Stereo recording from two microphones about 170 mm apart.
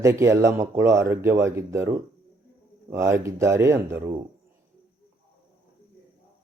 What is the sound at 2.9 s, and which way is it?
Speech, 15° right (ahead or behind).